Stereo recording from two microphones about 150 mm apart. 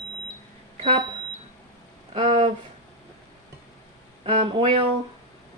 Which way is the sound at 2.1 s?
50° right (ahead or behind).